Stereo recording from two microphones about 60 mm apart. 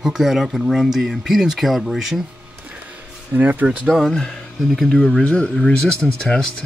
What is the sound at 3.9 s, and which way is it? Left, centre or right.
Speech, centre.